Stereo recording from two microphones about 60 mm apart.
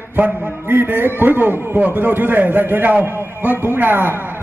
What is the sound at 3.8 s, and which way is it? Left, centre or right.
Speech, right.